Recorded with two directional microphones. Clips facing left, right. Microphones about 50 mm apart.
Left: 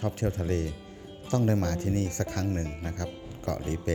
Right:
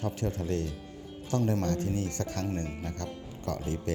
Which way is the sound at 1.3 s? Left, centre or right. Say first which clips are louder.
Left 2 dB; left.